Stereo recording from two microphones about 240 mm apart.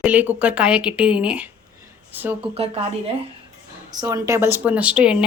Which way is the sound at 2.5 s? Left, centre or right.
Right.